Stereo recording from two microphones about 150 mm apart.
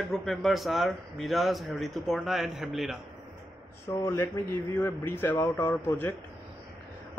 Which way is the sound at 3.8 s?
20° left (ahead or behind).